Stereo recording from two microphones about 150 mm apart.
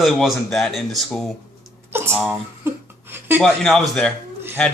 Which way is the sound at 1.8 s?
15° right (ahead or behind).